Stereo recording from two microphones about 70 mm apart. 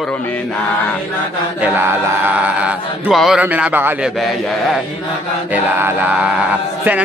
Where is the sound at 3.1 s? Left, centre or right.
Centre.